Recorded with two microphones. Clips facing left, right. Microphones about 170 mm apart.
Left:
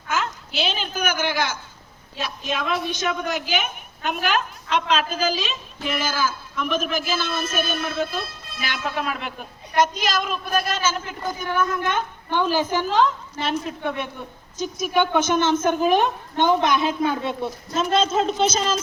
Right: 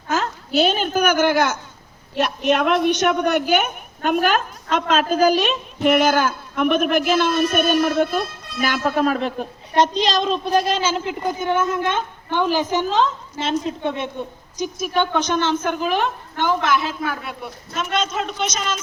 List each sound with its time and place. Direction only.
0.1 s a woman's voice: 40° right (ahead or behind)
2.1 s a woman's voice: 75° right (ahead or behind)
4.0 s a woman's voice: 45° right (ahead or behind)
5.2 s a woman's voice: 60° right (ahead or behind); by 14.7 s 20° right (ahead or behind)
14.9 s a woman's voice: 10° left (ahead or behind); by 18.8 s 30° left (ahead or behind)